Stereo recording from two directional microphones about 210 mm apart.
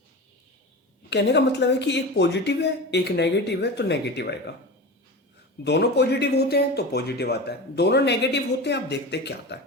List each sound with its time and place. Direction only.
1.1 s speech: 55° left (ahead or behind)
5.6 s speech: 50° left (ahead or behind)